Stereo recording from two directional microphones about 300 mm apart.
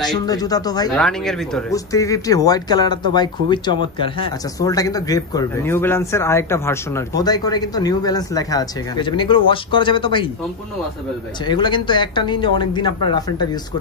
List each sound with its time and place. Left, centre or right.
0.1 s speech: centre
0.9 s speech: centre
11.4 s speech: centre